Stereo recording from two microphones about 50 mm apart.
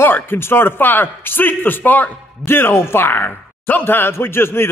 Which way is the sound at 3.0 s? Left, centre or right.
Left.